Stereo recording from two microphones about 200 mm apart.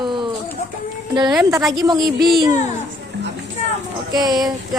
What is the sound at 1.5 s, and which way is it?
Speech, 15° right (ahead or behind).